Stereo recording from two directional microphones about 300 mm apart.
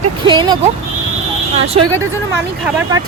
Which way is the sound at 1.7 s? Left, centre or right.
Centre.